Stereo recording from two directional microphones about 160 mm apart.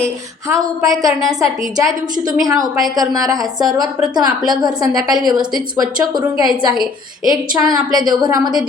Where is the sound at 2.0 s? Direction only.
25° right (ahead or behind).